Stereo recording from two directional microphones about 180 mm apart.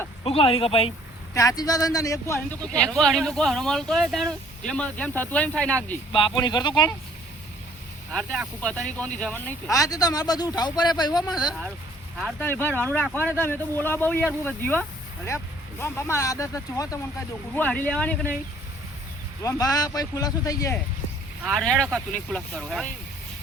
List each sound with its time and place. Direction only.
0.3 s speech: 30° left (ahead or behind)
1.3 s speech: 20° left (ahead or behind)
6.1 s speech: 30° left (ahead or behind)
8.1 s speech: centre (ahead or behind); by 11.2 s 20° left (ahead or behind)
12.4 s speech: 10° left (ahead or behind)
19.4 s speech: 20° left (ahead or behind)
21.4 s speech: centre (ahead or behind)